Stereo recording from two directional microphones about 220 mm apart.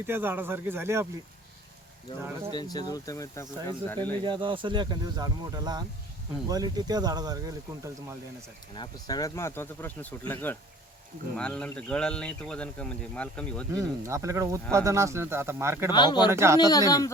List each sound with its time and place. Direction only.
0.1 s speech: 10° right (ahead or behind)
2.5 s speech: 20° left (ahead or behind)
4.2 s speech: 20° right (ahead or behind)
8.7 s speech: 20° left (ahead or behind)
13.7 s speech: 15° right (ahead or behind)
15.9 s speech: 20° left (ahead or behind)
16.3 s speech: 10° right (ahead or behind)
16.6 s speech: 15° left (ahead or behind)